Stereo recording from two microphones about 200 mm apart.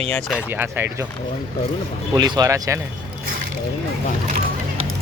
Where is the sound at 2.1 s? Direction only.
20° right (ahead or behind).